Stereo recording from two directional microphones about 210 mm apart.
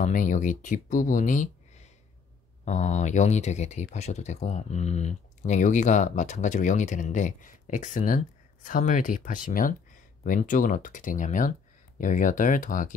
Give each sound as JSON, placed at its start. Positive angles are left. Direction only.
{"t": 0.0, "sound": "speech", "side_deg": 40}